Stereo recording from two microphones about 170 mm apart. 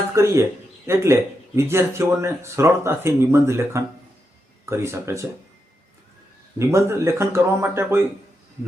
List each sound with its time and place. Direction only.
0.1 s speech: 15° right (ahead or behind)
6.6 s speech: 15° right (ahead or behind)